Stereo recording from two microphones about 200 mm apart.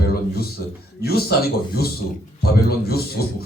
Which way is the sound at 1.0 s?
50° left (ahead or behind).